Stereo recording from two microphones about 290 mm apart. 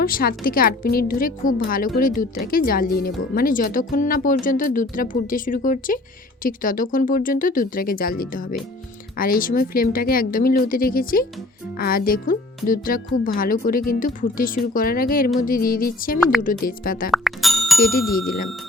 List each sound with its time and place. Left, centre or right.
0.0 s speech: left
17.1 s music: centre
17.7 s speech: left